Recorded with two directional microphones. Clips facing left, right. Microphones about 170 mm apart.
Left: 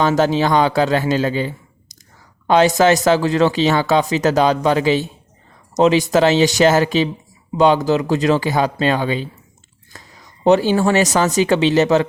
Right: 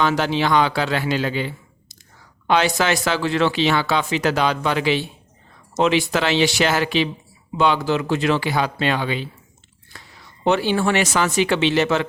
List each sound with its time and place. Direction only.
0.0 s speech: 45° left (ahead or behind)